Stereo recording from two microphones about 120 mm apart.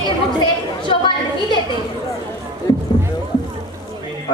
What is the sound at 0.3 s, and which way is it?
Speech, 40° left (ahead or behind).